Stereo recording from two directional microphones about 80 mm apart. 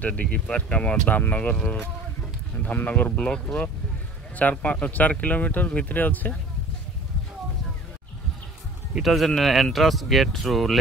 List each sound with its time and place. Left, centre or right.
0.0 s speech: centre
8.9 s speech: centre